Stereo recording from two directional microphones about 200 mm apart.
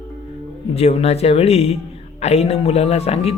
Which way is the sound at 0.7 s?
30° left (ahead or behind).